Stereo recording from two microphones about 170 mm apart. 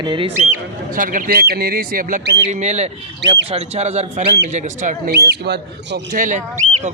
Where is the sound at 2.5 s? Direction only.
40° right (ahead or behind).